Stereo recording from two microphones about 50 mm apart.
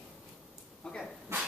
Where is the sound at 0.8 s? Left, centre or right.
Centre.